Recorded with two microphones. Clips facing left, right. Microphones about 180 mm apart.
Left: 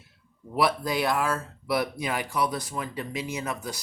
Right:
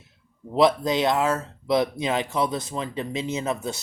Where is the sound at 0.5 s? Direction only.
20° right (ahead or behind).